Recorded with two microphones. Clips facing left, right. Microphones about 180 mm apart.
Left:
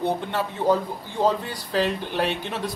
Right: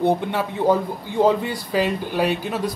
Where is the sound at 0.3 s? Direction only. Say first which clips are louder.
Right 3 dB; 15° right (ahead or behind).